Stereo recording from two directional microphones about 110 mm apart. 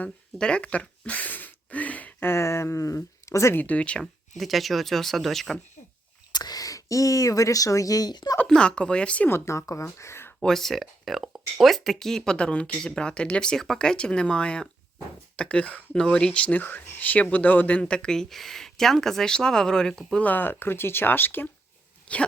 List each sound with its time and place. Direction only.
0.0 s speech: 10° left (ahead or behind)
6.3 s speech: 35° left (ahead or behind)
8.4 s speech: 10° left (ahead or behind)
9.5 s speech: 25° left (ahead or behind)
10.4 s speech: 5° left (ahead or behind)
22.0 s dog: 10° left (ahead or behind)